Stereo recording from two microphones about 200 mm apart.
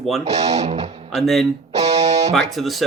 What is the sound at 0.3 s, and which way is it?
Speech, 35° right (ahead or behind).